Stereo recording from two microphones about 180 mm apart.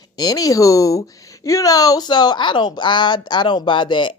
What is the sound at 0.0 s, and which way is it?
A woman's voice, 20° left (ahead or behind).